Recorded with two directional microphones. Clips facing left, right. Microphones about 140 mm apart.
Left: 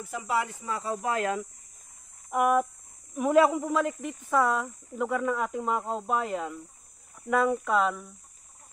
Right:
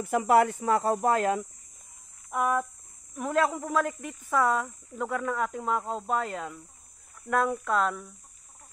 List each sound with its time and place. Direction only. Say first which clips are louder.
0.0 s speech: right 8 dB; 60° right (ahead or behind); by 1.4 s 40° right (ahead or behind)
2.3 s speech: left 3 dB; 10° left (ahead or behind)